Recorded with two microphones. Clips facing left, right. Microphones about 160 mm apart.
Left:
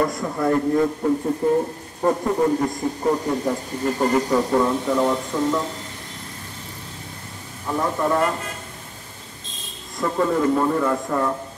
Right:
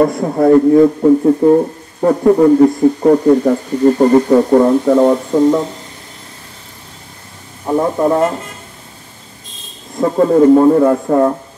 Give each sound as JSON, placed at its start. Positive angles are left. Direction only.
{"t": 0.0, "sound": "a man's voice", "side_deg": -50}
{"t": 4.0, "sound": "speech", "side_deg": -35}
{"t": 7.6, "sound": "speech", "side_deg": -30}
{"t": 9.9, "sound": "speech", "side_deg": -35}